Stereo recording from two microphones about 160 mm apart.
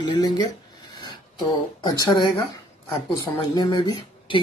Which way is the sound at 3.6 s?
25° left (ahead or behind).